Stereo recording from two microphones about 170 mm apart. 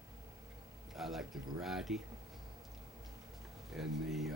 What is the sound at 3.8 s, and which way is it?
Speech, centre (ahead or behind).